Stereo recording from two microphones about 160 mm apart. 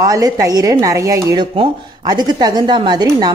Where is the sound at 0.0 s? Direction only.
25° right (ahead or behind).